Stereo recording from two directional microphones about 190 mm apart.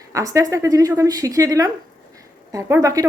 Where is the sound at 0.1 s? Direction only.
15° right (ahead or behind).